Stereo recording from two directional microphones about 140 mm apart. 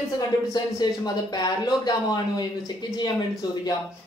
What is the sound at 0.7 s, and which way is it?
A woman's voice, 30° left (ahead or behind).